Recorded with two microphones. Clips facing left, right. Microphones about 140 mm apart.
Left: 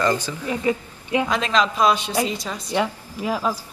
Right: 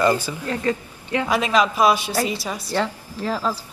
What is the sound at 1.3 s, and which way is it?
A woman's voice, 10° right (ahead or behind).